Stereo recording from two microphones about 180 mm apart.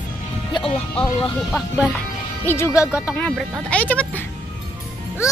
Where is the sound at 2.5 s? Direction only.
15° left (ahead or behind).